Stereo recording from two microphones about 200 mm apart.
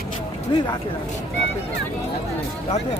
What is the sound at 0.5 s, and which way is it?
Speech, 25° left (ahead or behind).